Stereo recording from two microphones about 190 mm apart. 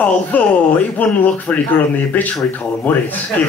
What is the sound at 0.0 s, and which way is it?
Speech, 10° left (ahead or behind).